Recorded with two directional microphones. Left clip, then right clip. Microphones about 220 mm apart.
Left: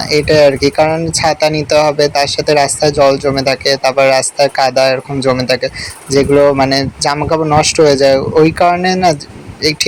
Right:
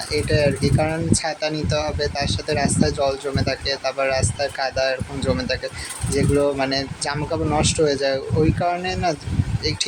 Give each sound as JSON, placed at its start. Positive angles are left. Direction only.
{"t": 0.1, "sound": "speech", "side_deg": 35}